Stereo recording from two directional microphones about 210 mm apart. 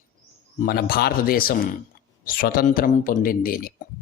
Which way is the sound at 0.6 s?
45° left (ahead or behind).